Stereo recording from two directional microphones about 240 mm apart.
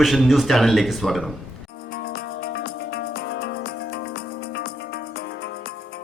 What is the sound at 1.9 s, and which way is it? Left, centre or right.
Music, left.